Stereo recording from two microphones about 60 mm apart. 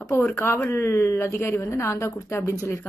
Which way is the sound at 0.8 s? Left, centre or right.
Left.